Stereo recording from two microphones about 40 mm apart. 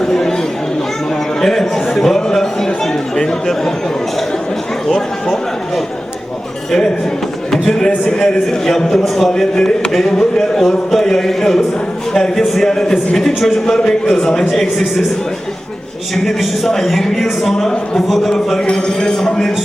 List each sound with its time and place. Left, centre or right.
0.0 s chatter: centre
1.4 s a man's voice: centre
4.9 s a man's voice: centre
7.5 s a man's voice: centre
9.4 s a man's voice: centre
16.4 s a man's voice: centre